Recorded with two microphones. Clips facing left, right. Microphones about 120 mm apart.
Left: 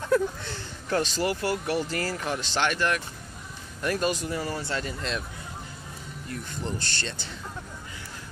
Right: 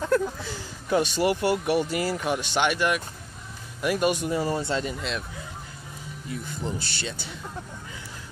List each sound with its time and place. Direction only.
0.1 s speech: 5° right (ahead or behind); by 4.9 s 20° right (ahead or behind)
6.2 s speech: 5° right (ahead or behind)